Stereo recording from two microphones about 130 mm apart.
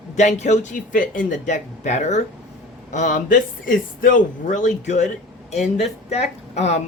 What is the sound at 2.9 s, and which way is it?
A man's voice, 75° left (ahead or behind).